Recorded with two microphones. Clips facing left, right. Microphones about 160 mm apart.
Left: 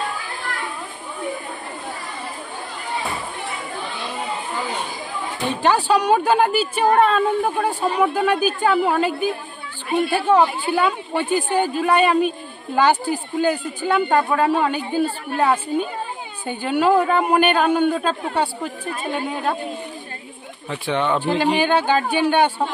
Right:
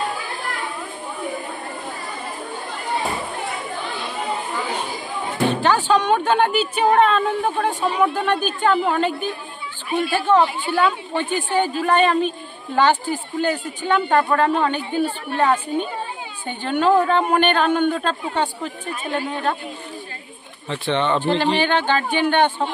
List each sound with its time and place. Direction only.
5.7 s a woman's voice: 10° left (ahead or behind)
20.7 s a woman's voice: 10° left (ahead or behind)